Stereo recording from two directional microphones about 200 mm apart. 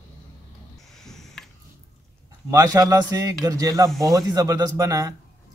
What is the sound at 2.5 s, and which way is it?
A man's voice, 15° right (ahead or behind).